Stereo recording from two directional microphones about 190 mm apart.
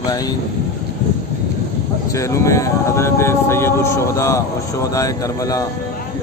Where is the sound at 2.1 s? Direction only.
15° left (ahead or behind).